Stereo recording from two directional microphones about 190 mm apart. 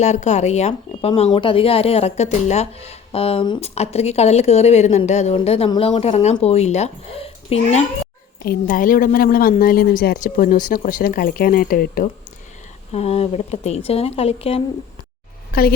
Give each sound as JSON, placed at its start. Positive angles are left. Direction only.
{"t": 0.0, "sound": "speech", "side_deg": 35}
{"t": 8.4, "sound": "speech", "side_deg": 45}
{"t": 12.9, "sound": "speech", "side_deg": 35}
{"t": 15.5, "sound": "speech", "side_deg": 50}